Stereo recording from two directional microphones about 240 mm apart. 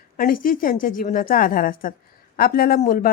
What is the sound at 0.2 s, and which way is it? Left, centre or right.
A woman's voice, left.